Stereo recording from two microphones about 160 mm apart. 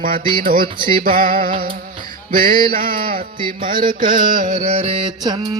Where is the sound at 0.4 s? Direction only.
60° right (ahead or behind).